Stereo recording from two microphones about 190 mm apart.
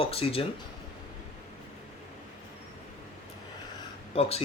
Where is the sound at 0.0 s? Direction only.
30° left (ahead or behind).